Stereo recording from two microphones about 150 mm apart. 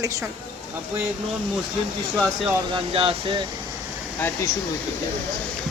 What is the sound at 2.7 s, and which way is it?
Speech, 40° right (ahead or behind).